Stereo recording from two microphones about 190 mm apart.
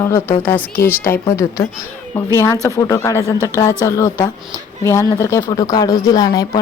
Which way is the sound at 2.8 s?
15° left (ahead or behind).